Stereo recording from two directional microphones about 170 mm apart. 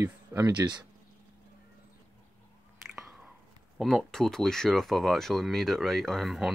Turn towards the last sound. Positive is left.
turn(degrees=0)  # may be behind; listen again after turning